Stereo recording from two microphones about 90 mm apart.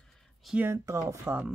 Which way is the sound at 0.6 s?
30° right (ahead or behind).